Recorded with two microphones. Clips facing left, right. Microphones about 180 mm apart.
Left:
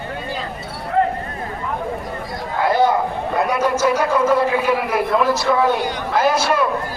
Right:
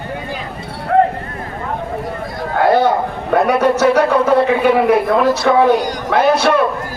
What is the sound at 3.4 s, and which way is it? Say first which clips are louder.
A man's voice: right 5 dB; 65° right (ahead or behind).